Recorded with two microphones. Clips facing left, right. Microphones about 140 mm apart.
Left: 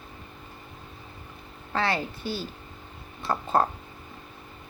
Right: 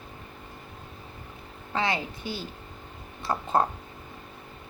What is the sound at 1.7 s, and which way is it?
A woman's voice, 15° right (ahead or behind).